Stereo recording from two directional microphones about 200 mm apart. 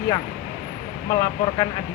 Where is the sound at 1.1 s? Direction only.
30° left (ahead or behind).